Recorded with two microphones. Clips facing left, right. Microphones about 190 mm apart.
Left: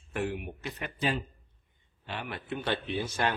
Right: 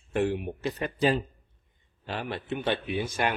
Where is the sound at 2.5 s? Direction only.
15° right (ahead or behind).